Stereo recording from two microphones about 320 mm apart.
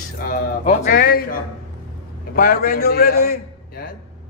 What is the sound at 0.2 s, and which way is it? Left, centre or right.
A man's voice, left.